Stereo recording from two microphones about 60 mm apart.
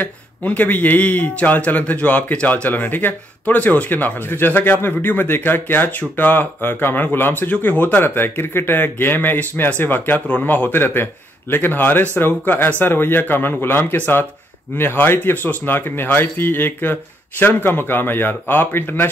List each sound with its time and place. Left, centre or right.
0.0 s a man's voice: left